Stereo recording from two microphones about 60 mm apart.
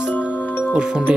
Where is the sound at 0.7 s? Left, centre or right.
Centre.